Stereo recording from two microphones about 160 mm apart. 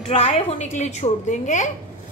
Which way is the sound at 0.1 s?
40° left (ahead or behind).